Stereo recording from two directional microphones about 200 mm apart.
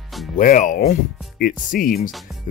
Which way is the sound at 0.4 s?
40° left (ahead or behind).